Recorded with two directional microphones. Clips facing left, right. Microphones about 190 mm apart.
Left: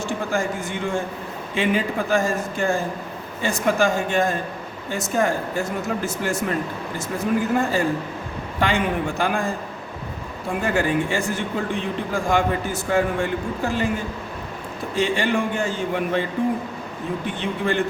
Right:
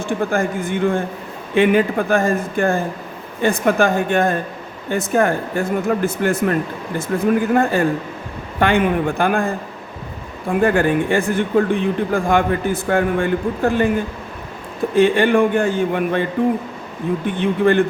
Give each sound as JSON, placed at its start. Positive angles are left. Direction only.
{"t": 0.0, "sound": "a man's voice", "side_deg": -55}
{"t": 10.5, "sound": "a man's voice", "side_deg": -55}
{"t": 14.9, "sound": "a man's voice", "side_deg": -55}
{"t": 17.2, "sound": "a man's voice", "side_deg": -55}